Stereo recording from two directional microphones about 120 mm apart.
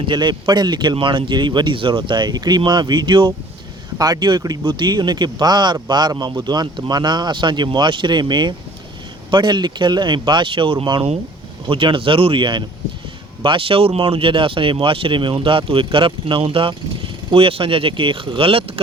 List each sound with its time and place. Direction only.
0.1 s speech: 40° right (ahead or behind)